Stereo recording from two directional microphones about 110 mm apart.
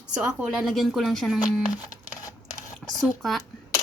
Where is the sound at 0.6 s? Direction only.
Centre (ahead or behind).